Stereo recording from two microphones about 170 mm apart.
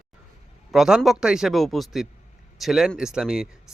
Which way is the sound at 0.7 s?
5° right (ahead or behind).